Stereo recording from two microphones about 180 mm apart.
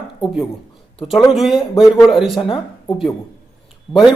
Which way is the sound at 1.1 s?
Centre (ahead or behind).